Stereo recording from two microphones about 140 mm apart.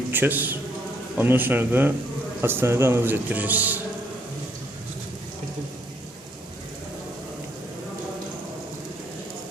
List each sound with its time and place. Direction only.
0.1 s a man's voice: 15° right (ahead or behind)